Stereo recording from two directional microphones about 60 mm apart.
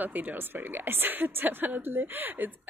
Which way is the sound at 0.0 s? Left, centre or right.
Right.